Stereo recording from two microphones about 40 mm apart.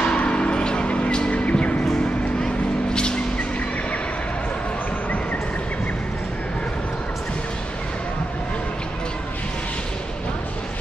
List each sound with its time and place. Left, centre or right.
0.0 s music: left
2.4 s vehicle: centre